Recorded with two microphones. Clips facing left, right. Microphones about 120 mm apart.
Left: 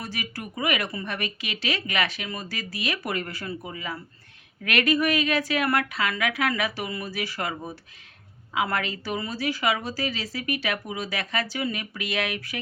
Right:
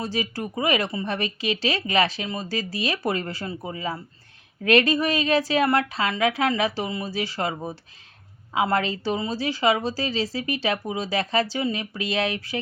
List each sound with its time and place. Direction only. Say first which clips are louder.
0.0 s speech: right 7 dB; 30° right (ahead or behind)